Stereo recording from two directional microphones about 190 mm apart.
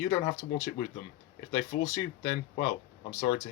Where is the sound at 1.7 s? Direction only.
60° left (ahead or behind).